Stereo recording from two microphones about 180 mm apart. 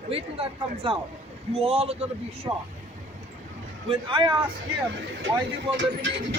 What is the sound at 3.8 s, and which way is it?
Speech, 30° right (ahead or behind).